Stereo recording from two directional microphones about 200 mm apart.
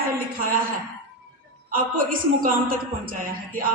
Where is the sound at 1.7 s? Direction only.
45° right (ahead or behind).